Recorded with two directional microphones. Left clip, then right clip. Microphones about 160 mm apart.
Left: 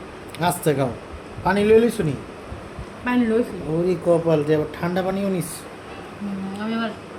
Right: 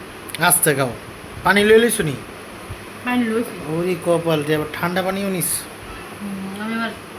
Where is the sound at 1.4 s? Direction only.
10° right (ahead or behind).